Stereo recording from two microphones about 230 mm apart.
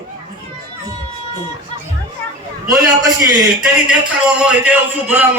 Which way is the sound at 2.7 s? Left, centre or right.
Centre.